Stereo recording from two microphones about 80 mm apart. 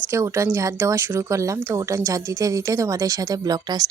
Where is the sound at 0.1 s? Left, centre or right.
Right.